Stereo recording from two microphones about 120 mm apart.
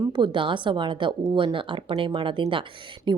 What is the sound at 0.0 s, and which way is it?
Speech, 40° right (ahead or behind).